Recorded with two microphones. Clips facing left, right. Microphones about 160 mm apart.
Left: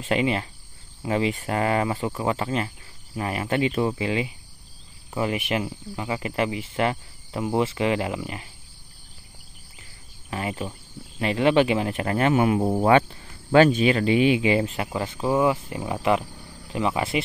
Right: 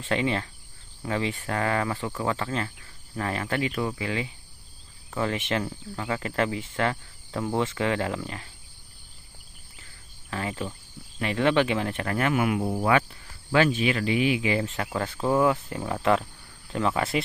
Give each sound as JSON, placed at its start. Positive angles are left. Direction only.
{"t": 0.0, "sound": "speech", "side_deg": 15}
{"t": 10.6, "sound": "speech", "side_deg": 10}
{"t": 14.9, "sound": "speech", "side_deg": 5}